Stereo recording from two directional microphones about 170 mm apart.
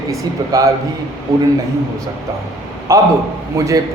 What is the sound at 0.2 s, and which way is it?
Speech, 20° right (ahead or behind).